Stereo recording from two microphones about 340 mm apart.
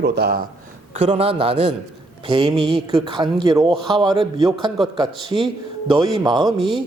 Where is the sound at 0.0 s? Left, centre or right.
Right.